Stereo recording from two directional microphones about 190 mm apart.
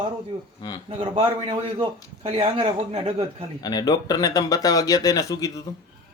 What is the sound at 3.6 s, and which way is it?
Speech, 20° left (ahead or behind).